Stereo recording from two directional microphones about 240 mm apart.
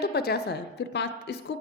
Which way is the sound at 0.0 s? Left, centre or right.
Left.